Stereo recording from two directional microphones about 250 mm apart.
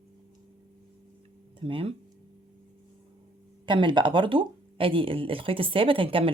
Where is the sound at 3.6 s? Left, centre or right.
Centre.